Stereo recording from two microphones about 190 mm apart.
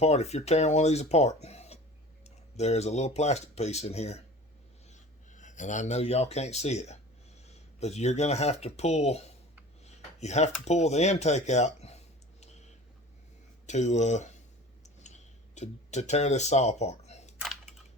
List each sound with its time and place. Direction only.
0.0 s speech: 35° left (ahead or behind)
9.8 s a sound: 35° left (ahead or behind)
10.7 s speech: 35° left (ahead or behind)
13.7 s speech: 40° left (ahead or behind)
14.8 s clicking: 40° left (ahead or behind)